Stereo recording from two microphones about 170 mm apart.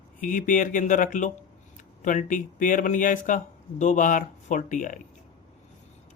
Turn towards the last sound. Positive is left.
turn(degrees=50)  # may be behind; listen again after turning